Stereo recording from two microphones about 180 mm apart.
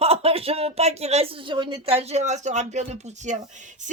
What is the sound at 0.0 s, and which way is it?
Speech, 35° right (ahead or behind).